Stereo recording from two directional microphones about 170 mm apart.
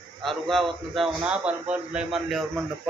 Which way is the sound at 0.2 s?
Centre (ahead or behind).